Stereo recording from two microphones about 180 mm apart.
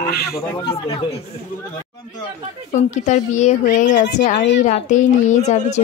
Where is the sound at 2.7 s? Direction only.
40° left (ahead or behind).